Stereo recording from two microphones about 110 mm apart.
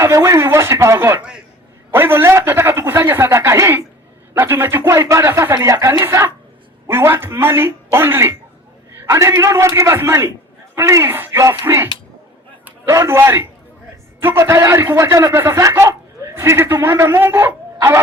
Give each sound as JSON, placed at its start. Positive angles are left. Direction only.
{"t": 0.0, "sound": "a man's voice", "side_deg": -25}